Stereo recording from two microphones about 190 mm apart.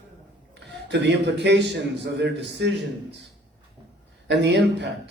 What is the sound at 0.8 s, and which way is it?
A man's voice, 65° right (ahead or behind).